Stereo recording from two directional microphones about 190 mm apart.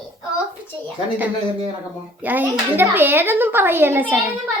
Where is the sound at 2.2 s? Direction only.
10° right (ahead or behind).